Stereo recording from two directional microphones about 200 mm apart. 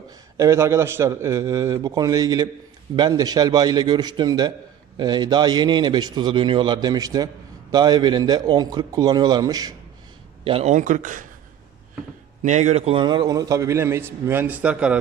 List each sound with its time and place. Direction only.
0.3 s a man's voice: 15° right (ahead or behind)
10.4 s speech: 30° right (ahead or behind)
12.4 s a man's voice: 35° right (ahead or behind); by 14.9 s 5° right (ahead or behind)